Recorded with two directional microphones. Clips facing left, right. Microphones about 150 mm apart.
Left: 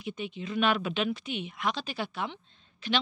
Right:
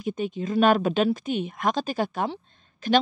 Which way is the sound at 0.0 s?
45° right (ahead or behind).